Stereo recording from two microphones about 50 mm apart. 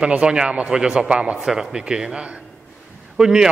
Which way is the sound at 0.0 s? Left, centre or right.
Centre.